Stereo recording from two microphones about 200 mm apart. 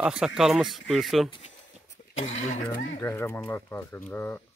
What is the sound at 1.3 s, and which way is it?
Speech, 30° left (ahead or behind).